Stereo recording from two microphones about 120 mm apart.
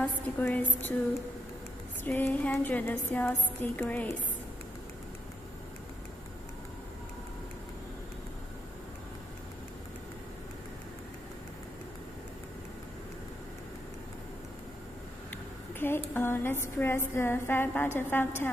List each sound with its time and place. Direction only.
0.0 s a woman's voice: 15° left (ahead or behind)
2.0 s a woman's voice: 15° left (ahead or behind)
15.8 s a woman's voice: 20° left (ahead or behind)